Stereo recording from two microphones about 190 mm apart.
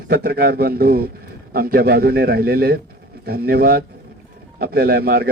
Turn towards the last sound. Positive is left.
turn(degrees=-55)  # may be behind; listen again after turning